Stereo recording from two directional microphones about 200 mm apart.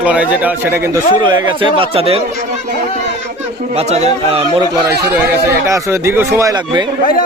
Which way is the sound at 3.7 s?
30° right (ahead or behind).